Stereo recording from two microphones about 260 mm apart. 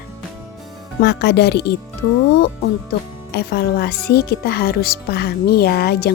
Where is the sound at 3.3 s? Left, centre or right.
Left.